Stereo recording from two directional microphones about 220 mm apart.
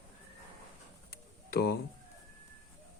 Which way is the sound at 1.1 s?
45° left (ahead or behind).